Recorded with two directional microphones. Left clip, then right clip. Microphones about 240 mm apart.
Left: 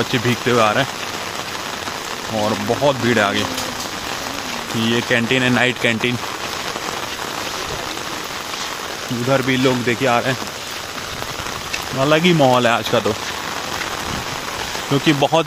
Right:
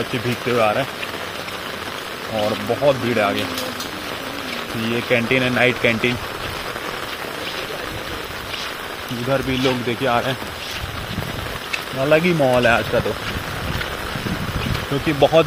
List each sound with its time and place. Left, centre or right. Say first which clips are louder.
0.5 s speech: left 2 dB; left
2.4 s speech: even; left
5.1 s speech: even; centre
9.3 s speech: left 3 dB; centre
12.0 s speech: left 2 dB; left
15.0 s speech: right 2 dB; left